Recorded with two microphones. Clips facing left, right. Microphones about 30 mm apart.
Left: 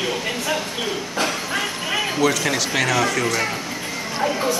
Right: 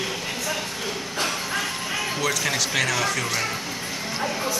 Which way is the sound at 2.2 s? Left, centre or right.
Centre.